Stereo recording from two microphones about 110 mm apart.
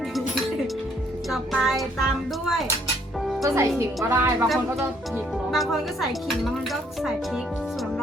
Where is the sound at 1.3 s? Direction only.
Centre (ahead or behind).